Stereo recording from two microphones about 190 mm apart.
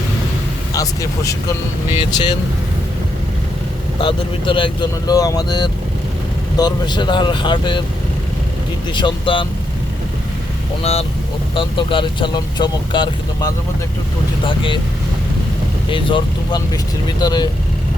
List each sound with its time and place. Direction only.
0.7 s speech: 15° left (ahead or behind)
4.0 s speech: 25° left (ahead or behind)
9.0 s speech: 25° left (ahead or behind)
11.5 s speech: 25° left (ahead or behind)
15.9 s speech: 25° left (ahead or behind)